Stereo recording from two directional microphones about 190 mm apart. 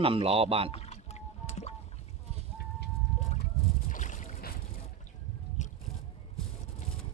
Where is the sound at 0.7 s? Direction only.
35° left (ahead or behind).